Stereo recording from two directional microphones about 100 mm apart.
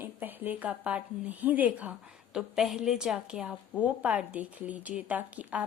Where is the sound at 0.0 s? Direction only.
20° right (ahead or behind).